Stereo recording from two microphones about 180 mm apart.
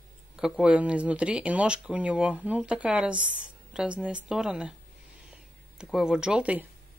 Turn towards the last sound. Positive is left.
turn(degrees=-5)  # may be behind; listen again after turning